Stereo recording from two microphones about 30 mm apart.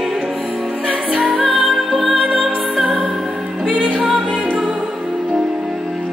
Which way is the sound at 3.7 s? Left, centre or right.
Right.